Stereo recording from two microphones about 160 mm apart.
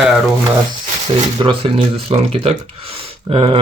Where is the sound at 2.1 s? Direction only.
40° right (ahead or behind).